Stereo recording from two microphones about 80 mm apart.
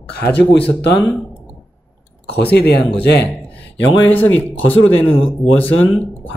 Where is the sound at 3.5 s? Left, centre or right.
Centre.